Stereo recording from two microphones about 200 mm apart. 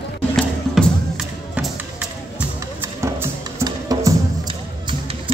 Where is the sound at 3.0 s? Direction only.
15° right (ahead or behind).